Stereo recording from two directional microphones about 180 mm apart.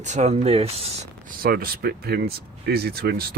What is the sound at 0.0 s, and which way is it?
Speech, 40° right (ahead or behind).